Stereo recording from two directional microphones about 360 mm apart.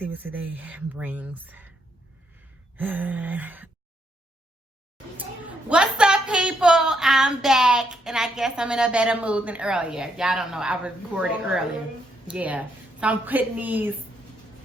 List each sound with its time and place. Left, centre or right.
0.0 s a woman's voice: centre
2.7 s a woman's voice: centre
5.5 s a woman's voice: centre